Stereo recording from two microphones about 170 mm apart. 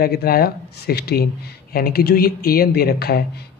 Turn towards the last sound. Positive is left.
turn(degrees=70)  # may be behind; listen again after turning